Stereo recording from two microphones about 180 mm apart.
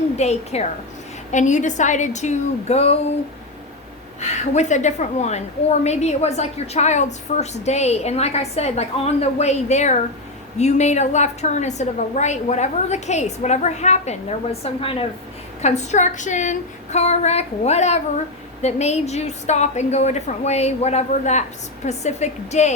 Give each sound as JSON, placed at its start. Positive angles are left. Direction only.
{"t": 0.2, "sound": "a woman's voice", "side_deg": 40}
{"t": 4.2, "sound": "a woman's voice", "side_deg": 40}